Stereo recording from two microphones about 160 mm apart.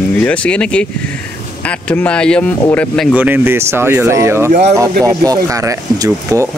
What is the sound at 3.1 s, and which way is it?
Speech, 10° right (ahead or behind).